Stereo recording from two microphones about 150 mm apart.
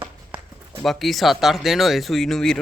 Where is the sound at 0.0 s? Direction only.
15° right (ahead or behind).